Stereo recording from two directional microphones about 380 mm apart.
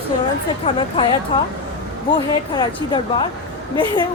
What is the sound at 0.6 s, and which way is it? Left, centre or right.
Speech, centre.